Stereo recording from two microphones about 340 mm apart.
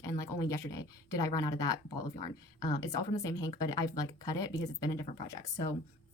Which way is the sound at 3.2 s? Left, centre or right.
Centre.